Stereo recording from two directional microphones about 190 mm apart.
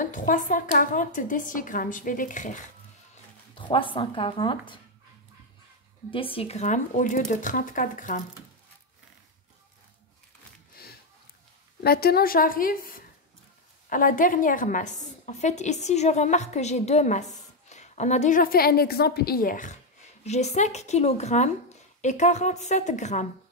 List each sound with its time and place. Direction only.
0.0 s a woman's voice: 45° left (ahead or behind)
3.5 s speech: 25° left (ahead or behind)
6.0 s a woman's voice: 30° left (ahead or behind); by 8.2 s 45° left (ahead or behind)
10.8 s a sound: 55° left (ahead or behind)
11.8 s a woman's voice: 55° left (ahead or behind); by 23.2 s 40° left (ahead or behind)